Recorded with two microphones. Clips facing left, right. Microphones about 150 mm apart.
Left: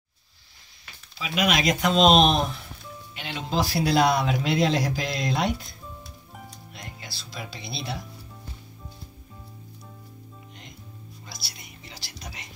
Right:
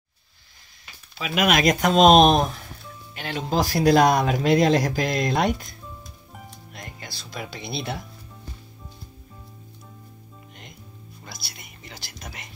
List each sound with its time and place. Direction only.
1.1 s speech: 55° right (ahead or behind)
6.7 s speech: 50° right (ahead or behind)
11.2 s whispering: 55° right (ahead or behind)